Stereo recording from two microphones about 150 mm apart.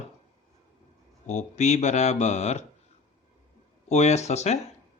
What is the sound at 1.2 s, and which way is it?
Speech, 50° left (ahead or behind).